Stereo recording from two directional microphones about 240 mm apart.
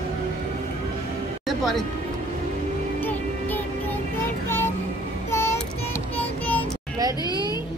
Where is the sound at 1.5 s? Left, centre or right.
Centre.